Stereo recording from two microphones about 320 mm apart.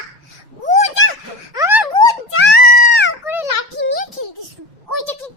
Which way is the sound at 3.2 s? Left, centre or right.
Centre.